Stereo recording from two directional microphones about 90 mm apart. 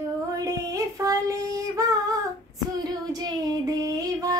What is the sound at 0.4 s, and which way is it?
Female singing, 40° right (ahead or behind).